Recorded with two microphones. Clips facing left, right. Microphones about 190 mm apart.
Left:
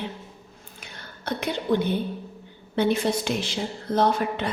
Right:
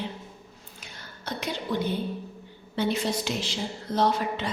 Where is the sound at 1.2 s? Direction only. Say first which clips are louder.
Left 5 dB; 60° left (ahead or behind).